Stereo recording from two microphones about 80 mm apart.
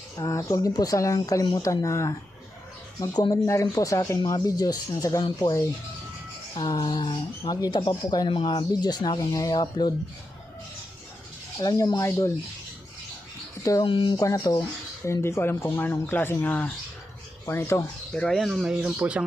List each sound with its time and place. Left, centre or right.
0.2 s speech: left
3.0 s speech: left
3.4 s speech: left
6.9 s a sound: left
7.5 s speech: left
8.7 s speech: left
11.6 s speech: left
13.6 s speech: left
13.8 s a sound: left
14.2 s speech: left
17.4 s speech: left
18.1 s speech: centre
18.3 s speech: centre